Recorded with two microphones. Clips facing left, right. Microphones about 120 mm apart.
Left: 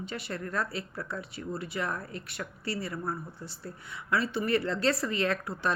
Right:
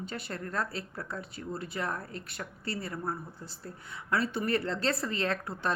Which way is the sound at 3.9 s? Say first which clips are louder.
Left 1 dB; 40° right (ahead or behind).